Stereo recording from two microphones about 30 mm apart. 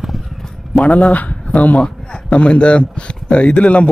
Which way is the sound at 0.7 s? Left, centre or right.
Left.